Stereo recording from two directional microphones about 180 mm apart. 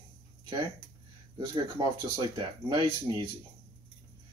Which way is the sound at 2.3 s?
25° right (ahead or behind).